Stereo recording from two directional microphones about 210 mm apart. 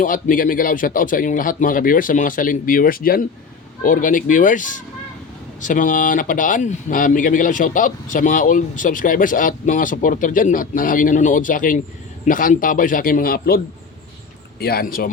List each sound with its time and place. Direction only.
0.0 s speech: 40° left (ahead or behind)
14.6 s speech: 45° left (ahead or behind)